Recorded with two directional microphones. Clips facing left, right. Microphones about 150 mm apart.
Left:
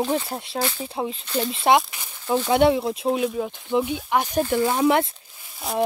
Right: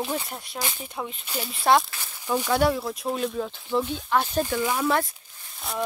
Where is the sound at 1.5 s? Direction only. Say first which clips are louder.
Left 1 dB; 20° left (ahead or behind).